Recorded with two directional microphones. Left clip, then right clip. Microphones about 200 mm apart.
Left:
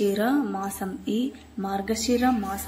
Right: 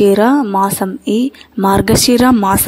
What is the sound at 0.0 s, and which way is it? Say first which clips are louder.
Speech: right 14 dB; 45° right (ahead or behind).